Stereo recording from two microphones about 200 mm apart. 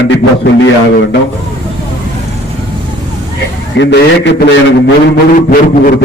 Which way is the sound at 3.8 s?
60° left (ahead or behind).